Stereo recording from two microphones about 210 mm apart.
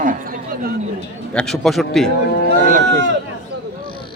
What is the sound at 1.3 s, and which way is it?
Speech, 5° left (ahead or behind).